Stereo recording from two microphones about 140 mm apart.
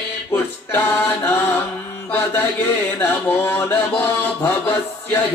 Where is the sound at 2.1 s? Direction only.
15° left (ahead or behind).